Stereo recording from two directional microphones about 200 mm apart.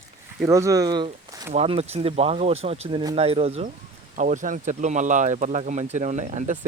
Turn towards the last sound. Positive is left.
turn(degrees=-35)  # may be behind; listen again after turning